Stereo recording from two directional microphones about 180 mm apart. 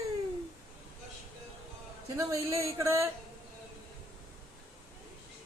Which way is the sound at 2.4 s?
15° right (ahead or behind).